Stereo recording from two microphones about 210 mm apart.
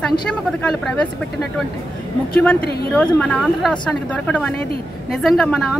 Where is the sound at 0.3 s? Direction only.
5° left (ahead or behind).